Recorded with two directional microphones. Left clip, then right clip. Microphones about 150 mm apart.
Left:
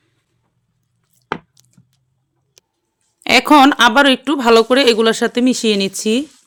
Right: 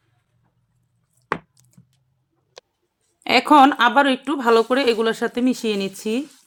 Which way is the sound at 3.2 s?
40° left (ahead or behind).